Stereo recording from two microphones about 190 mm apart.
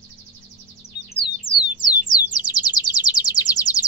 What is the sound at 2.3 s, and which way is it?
Bird, 20° left (ahead or behind).